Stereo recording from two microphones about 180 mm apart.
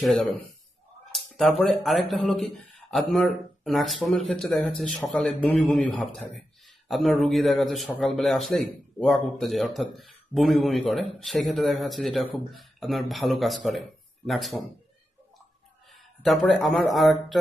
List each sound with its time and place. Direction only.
0.0 s speech: 5° left (ahead or behind)
1.6 s speech: centre (ahead or behind)
15.9 s speech: centre (ahead or behind)